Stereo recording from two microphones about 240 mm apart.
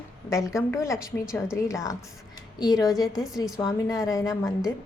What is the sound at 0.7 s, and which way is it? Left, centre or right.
A woman's voice, centre.